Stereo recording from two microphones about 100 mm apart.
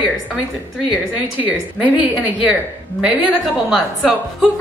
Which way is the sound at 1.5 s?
15° right (ahead or behind).